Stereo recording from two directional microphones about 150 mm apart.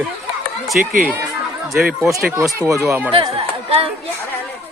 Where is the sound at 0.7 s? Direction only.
70° right (ahead or behind).